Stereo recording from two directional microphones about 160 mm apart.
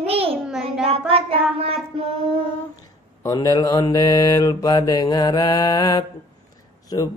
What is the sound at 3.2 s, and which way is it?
Mantra, 25° left (ahead or behind).